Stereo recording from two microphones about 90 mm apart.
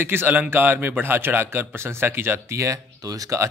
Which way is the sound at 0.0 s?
25° right (ahead or behind).